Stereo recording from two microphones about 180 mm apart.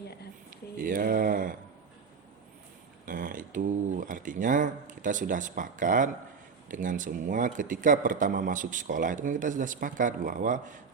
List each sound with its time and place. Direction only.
0.9 s a man's voice: 50° right (ahead or behind)
3.1 s a man's voice: 50° right (ahead or behind)